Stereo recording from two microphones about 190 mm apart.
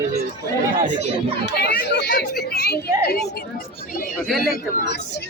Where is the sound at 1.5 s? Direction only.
60° left (ahead or behind).